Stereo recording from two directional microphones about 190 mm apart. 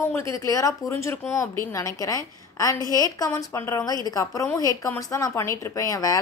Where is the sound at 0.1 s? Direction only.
15° left (ahead or behind).